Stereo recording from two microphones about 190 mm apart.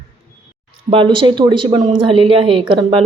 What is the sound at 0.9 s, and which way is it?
A woman's voice, 25° right (ahead or behind).